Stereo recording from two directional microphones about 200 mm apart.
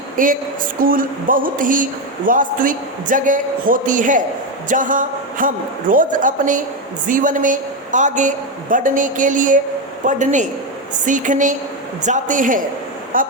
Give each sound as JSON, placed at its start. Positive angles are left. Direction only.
{"t": 0.2, "sound": "a man's voice", "side_deg": -40}